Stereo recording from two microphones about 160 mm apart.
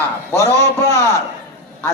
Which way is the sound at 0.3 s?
15° left (ahead or behind).